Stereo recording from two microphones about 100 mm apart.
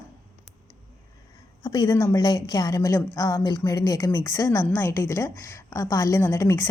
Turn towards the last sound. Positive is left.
turn(degrees=30)  # may be behind; listen again after turning